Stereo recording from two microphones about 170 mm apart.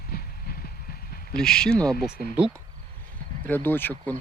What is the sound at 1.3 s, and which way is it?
Speech, 5° left (ahead or behind).